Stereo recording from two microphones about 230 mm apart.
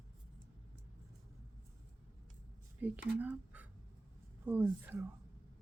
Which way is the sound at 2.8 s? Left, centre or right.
Centre.